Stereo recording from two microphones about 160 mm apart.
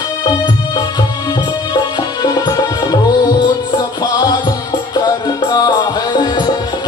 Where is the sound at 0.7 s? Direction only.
25° left (ahead or behind).